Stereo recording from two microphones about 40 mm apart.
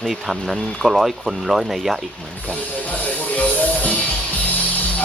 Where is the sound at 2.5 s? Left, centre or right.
Left.